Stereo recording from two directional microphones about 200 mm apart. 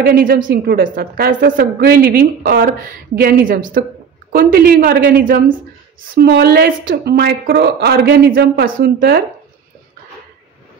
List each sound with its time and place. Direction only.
0.0 s a woman's voice: 45° right (ahead or behind)